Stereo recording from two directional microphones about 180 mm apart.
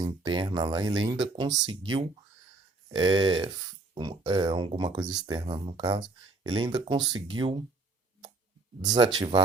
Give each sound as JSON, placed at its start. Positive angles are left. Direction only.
{"t": 0.0, "sound": "speech", "side_deg": -25}
{"t": 8.8, "sound": "speech", "side_deg": -25}